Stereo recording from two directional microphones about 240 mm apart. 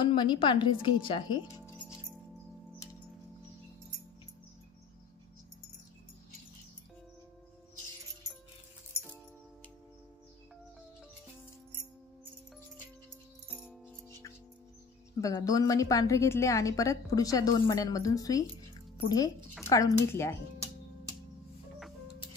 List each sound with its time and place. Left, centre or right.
0.0 s a woman's voice: centre
13.5 s music: centre
15.1 s a woman's voice: centre